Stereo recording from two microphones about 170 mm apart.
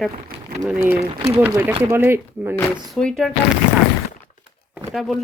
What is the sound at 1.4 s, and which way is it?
Speech, 10° right (ahead or behind).